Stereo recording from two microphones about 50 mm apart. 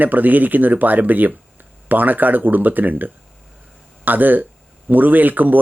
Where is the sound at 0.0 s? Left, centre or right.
Right.